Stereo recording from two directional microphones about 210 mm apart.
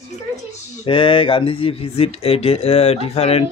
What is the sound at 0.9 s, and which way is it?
Speech, 25° left (ahead or behind).